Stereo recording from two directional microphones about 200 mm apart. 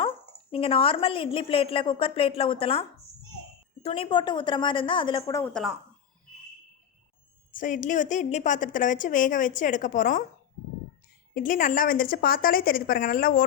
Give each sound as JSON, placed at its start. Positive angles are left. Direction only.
{"t": 0.5, "sound": "a woman's voice", "side_deg": 30}
{"t": 3.8, "sound": "a woman's voice", "side_deg": 30}
{"t": 7.5, "sound": "a woman's voice", "side_deg": 40}
{"t": 11.3, "sound": "a woman's voice", "side_deg": 40}